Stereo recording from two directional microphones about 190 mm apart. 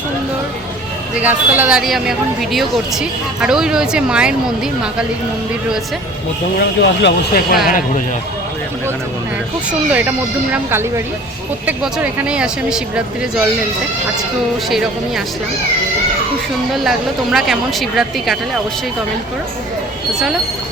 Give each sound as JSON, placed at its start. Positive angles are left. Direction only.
{"t": 1.2, "sound": "speech", "side_deg": -10}
{"t": 6.6, "sound": "speech", "side_deg": 60}
{"t": 7.7, "sound": "a man's voice", "side_deg": 45}
{"t": 9.9, "sound": "speech", "side_deg": -10}
{"t": 14.7, "sound": "speech", "side_deg": 0}
{"t": 17.3, "sound": "speech", "side_deg": 0}